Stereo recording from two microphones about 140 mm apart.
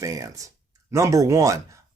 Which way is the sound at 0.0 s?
25° right (ahead or behind).